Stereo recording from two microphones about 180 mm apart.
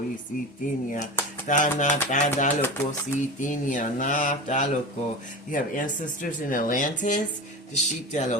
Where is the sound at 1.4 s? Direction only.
45° left (ahead or behind).